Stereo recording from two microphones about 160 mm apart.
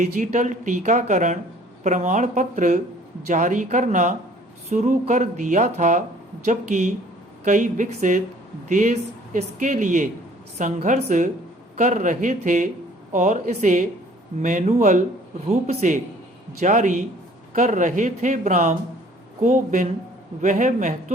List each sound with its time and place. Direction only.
0.0 s speech: 50° right (ahead or behind)